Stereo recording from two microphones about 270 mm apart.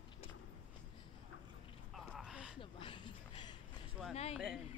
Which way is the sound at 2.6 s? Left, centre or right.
Centre.